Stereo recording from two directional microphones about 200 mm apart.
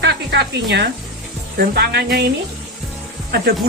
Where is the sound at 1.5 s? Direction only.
50° right (ahead or behind).